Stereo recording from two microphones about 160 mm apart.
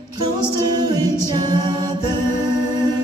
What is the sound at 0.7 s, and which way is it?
A capella, 25° right (ahead or behind).